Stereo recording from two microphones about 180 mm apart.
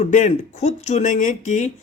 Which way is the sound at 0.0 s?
40° left (ahead or behind).